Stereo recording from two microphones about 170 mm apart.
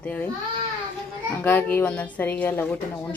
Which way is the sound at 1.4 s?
10° left (ahead or behind).